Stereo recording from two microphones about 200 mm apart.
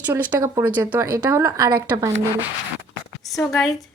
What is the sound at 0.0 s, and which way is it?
Speech, 10° right (ahead or behind).